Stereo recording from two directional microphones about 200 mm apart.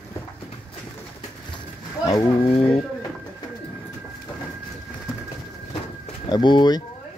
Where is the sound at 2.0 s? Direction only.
25° left (ahead or behind).